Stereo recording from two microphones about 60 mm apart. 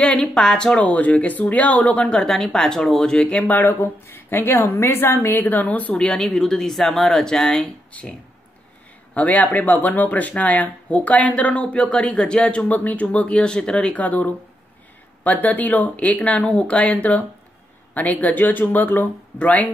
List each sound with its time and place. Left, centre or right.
0.2 s speech: centre
0.9 s speech: left
3.8 s a woman's voice: left
5.4 s speech: left
5.9 s speech: centre
13.9 s speech: left